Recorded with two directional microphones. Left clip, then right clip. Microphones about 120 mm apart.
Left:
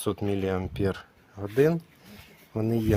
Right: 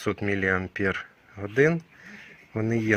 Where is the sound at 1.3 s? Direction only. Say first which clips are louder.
Right 1 dB; centre (ahead or behind).